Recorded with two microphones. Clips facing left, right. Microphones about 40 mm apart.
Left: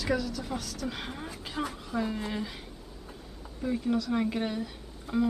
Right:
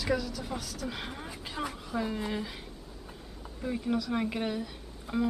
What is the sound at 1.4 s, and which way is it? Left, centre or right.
Speech, centre.